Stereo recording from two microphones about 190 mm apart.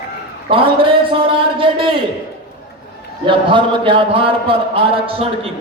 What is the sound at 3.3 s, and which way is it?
A man's voice, 25° right (ahead or behind).